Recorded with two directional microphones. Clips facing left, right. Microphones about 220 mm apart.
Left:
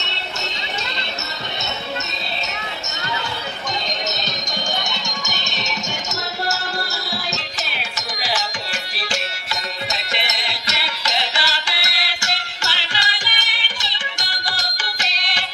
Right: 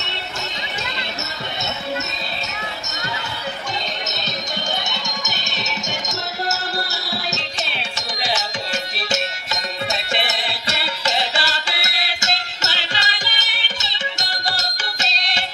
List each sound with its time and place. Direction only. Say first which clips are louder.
7.7 s music: right 1 dB; 25° right (ahead or behind)